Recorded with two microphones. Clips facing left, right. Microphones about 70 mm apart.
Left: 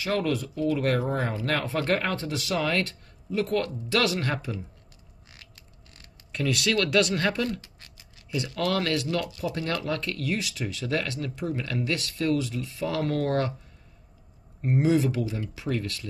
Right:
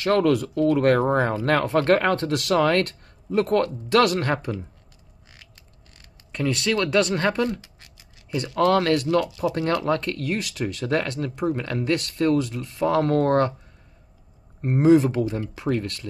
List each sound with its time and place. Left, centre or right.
0.0 s speech: right
1.1 s speech: right
6.3 s speech: right
14.7 s speech: right